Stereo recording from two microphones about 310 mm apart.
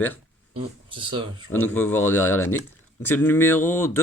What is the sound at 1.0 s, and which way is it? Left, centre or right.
Speech, centre.